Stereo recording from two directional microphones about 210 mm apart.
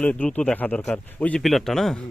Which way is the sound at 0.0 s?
5° left (ahead or behind).